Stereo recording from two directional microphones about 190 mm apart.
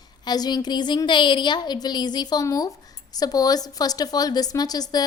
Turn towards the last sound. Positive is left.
turn(degrees=20)  # may be behind; listen again after turning